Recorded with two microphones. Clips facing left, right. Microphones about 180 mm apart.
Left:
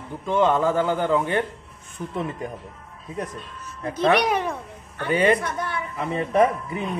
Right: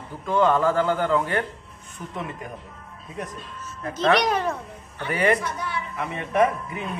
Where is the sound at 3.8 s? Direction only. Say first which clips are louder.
Left 1 dB; 15° left (ahead or behind).